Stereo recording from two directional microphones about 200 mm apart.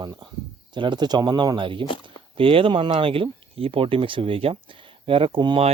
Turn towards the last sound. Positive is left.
turn(degrees=-25)  # may be behind; listen again after turning